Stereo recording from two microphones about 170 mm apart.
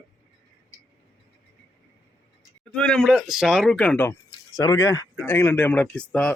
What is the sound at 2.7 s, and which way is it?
Speech, 5° left (ahead or behind).